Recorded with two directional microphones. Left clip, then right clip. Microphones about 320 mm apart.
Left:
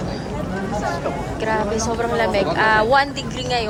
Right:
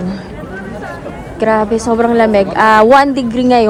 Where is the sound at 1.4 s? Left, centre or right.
Centre.